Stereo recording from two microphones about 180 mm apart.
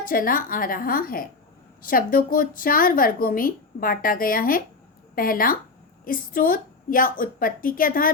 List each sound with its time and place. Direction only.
0.0 s a woman's voice: 50° left (ahead or behind)